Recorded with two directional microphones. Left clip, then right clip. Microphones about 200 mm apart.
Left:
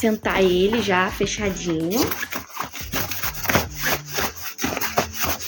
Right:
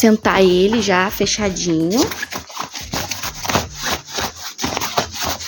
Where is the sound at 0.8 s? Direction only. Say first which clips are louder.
Right 4 dB; 40° right (ahead or behind).